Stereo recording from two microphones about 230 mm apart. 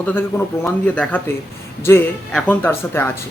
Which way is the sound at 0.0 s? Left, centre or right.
Centre.